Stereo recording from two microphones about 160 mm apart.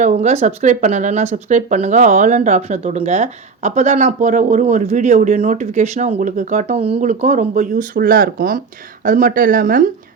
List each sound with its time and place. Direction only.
0.0 s speech: 45° right (ahead or behind)